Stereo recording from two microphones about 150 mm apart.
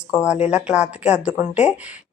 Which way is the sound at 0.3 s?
50° left (ahead or behind).